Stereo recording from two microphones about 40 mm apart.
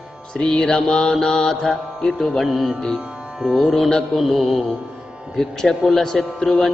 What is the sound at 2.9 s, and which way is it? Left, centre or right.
Music, right.